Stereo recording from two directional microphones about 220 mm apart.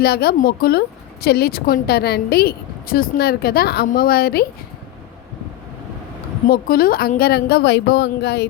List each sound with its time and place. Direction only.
0.0 s a woman's voice: 45° left (ahead or behind)
6.5 s a woman's voice: 40° left (ahead or behind)